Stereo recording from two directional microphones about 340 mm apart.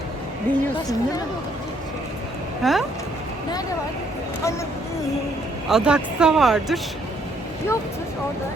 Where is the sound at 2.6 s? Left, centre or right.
Centre.